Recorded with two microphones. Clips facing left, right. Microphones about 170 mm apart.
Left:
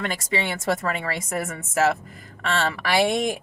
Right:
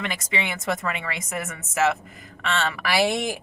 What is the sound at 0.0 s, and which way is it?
A woman's voice, 40° left (ahead or behind).